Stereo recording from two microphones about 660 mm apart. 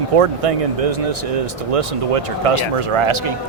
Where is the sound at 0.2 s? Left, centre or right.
Right.